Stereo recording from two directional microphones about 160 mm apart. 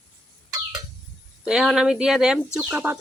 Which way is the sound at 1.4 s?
5° right (ahead or behind).